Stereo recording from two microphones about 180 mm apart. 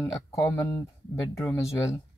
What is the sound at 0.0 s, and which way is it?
Speech, 15° left (ahead or behind).